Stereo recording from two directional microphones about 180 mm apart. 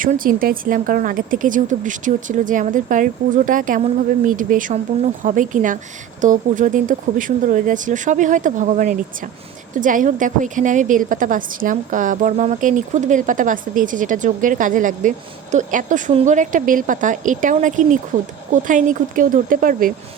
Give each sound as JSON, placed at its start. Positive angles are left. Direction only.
{"t": 0.0, "sound": "a woman's voice", "side_deg": -50}